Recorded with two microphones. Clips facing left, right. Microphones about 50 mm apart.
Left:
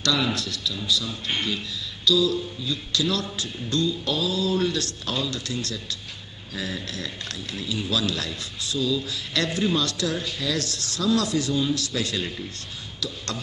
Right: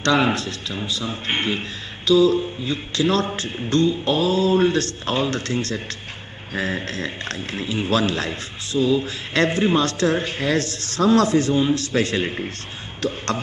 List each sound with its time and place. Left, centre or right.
0.0 s a man's voice: right